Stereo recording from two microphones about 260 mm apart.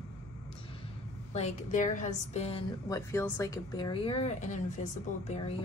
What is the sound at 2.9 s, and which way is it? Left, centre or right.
A woman's voice, centre.